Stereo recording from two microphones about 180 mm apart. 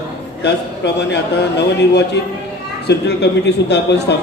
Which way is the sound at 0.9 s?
70° left (ahead or behind).